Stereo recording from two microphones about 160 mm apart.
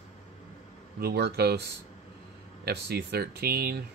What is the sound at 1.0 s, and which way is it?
Speech, 90° right.